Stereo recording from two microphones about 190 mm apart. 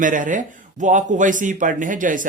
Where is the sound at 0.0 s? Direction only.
45° right (ahead or behind).